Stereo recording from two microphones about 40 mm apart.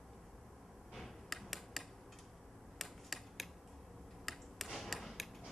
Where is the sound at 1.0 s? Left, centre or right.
Centre.